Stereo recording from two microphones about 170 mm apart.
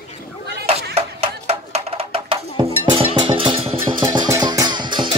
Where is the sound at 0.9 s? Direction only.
40° right (ahead or behind).